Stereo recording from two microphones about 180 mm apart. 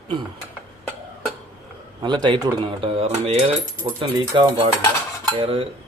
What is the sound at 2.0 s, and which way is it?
Dishes, 25° right (ahead or behind).